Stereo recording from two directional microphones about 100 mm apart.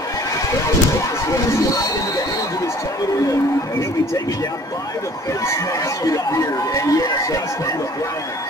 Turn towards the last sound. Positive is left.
turn(degrees=35)  # may be behind; listen again after turning